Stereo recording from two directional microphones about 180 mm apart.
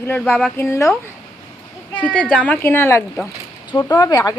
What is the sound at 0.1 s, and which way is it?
Speech, 5° left (ahead or behind).